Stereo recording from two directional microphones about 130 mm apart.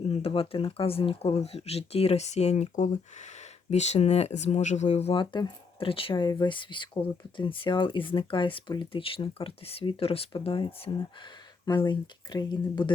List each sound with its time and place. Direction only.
0.1 s speech: 45° left (ahead or behind); by 3.2 s 70° left (ahead or behind)
3.7 s speech: 60° left (ahead or behind)
5.1 s speech: 35° left (ahead or behind)